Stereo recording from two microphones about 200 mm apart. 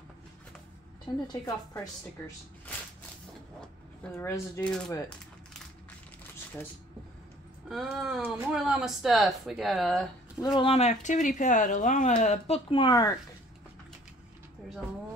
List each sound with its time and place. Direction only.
1.2 s a woman's voice: 20° left (ahead or behind)
4.1 s speech: 15° left (ahead or behind)
7.6 s speech: centre (ahead or behind)
10.4 s speech: 25° left (ahead or behind)